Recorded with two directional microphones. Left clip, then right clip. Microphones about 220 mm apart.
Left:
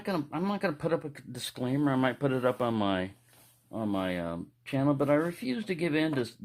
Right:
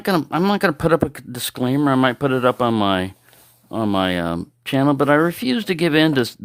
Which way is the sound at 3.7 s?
50° right (ahead or behind).